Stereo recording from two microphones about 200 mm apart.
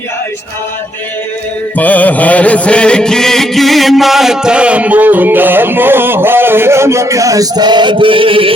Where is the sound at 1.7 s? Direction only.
10° left (ahead or behind).